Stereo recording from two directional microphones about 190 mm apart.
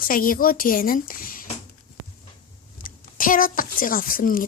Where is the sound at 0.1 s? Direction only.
50° left (ahead or behind).